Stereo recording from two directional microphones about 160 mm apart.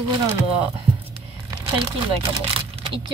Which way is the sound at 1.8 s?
30° right (ahead or behind).